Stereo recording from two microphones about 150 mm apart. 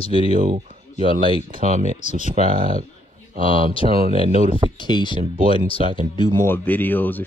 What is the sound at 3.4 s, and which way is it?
Speech, 35° left (ahead or behind).